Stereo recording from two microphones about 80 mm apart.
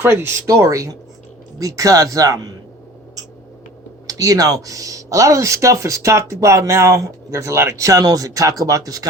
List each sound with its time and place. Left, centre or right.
0.0 s speech: right
4.0 s speech: right